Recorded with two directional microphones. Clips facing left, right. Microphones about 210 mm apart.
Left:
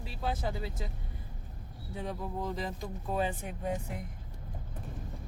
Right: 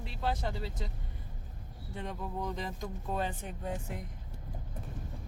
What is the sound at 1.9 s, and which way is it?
Speech, centre (ahead or behind).